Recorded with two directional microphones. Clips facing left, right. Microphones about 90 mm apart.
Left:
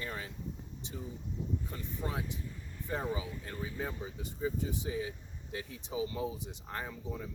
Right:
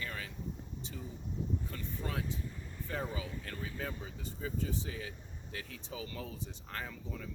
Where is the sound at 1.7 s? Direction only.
20° left (ahead or behind).